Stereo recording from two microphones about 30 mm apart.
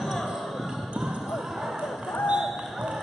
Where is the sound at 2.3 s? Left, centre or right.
Centre.